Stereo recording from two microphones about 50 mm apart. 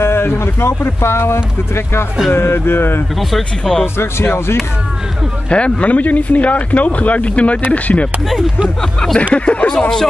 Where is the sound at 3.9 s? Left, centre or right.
Left.